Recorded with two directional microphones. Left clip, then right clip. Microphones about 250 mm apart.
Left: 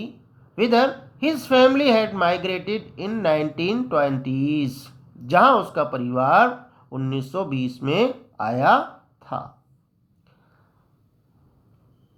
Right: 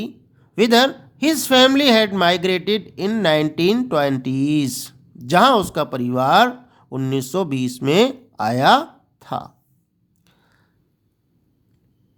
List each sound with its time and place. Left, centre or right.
0.5 s a woman's voice: right